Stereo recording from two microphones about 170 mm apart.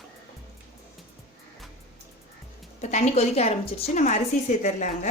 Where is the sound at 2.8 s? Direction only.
45° left (ahead or behind).